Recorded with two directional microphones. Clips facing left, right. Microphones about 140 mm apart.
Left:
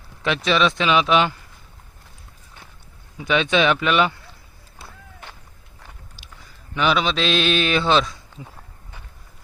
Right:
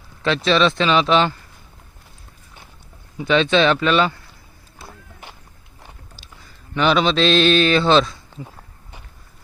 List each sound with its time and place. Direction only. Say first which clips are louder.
0.2 s speech: right 3 dB; 10° left (ahead or behind)
3.2 s speech: right 3 dB; 10° left (ahead or behind)
6.7 s speech: right 4 dB; 5° left (ahead or behind)